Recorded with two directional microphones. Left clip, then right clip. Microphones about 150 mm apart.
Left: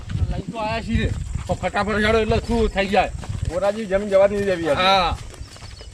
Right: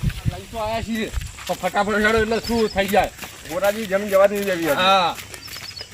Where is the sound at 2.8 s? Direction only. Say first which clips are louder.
Even; 25° left (ahead or behind).